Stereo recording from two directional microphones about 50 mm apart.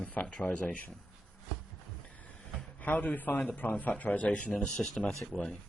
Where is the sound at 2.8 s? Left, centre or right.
Left.